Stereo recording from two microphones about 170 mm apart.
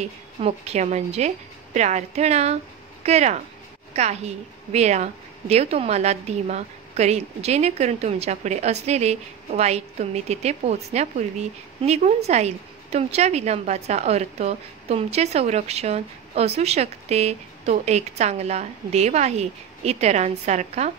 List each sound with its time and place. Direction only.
0.0 s a woman's voice: 40° right (ahead or behind)